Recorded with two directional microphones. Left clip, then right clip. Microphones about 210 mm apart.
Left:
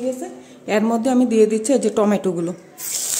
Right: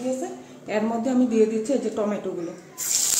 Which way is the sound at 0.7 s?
45° left (ahead or behind).